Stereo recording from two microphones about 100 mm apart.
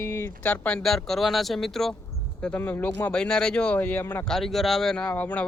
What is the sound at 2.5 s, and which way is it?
Speech, 20° left (ahead or behind).